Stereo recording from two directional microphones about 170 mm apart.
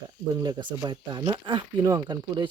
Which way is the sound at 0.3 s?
25° right (ahead or behind).